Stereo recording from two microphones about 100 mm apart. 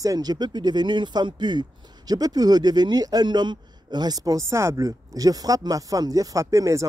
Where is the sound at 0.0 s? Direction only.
40° right (ahead or behind).